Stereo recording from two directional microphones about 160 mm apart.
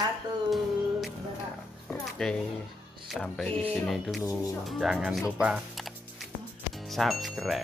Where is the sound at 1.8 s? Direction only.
5° left (ahead or behind).